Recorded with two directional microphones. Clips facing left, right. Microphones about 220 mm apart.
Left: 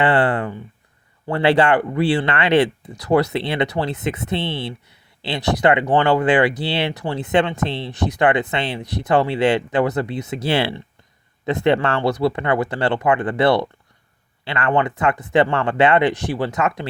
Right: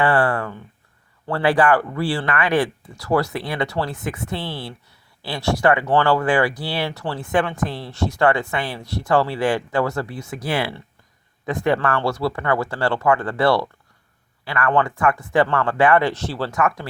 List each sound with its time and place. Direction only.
0.0 s speech: 20° left (ahead or behind)